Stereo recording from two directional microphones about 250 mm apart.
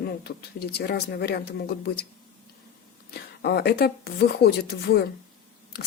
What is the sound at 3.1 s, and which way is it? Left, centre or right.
Speech, left.